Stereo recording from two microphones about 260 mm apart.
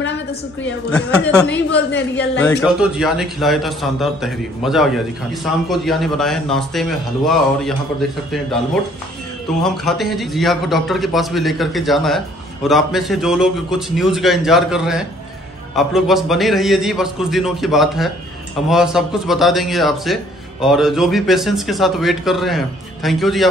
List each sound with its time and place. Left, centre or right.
0.0 s a sound: left
0.8 s a man's voice: centre
9.6 s a man's voice: centre